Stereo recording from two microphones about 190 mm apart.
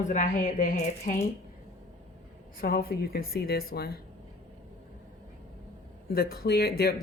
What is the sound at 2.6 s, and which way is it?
Speech, 50° left (ahead or behind).